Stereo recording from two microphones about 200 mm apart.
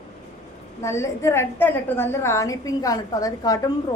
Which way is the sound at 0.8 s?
15° left (ahead or behind).